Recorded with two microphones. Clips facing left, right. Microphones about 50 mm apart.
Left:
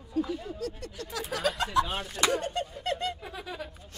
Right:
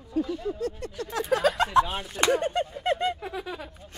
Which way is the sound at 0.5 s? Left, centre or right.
Right.